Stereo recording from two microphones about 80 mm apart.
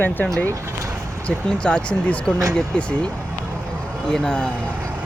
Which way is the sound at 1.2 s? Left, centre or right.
Centre.